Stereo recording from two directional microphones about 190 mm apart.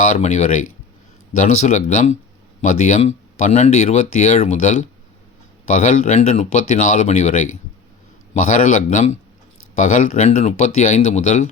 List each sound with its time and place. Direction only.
0.0 s speech: 40° left (ahead or behind)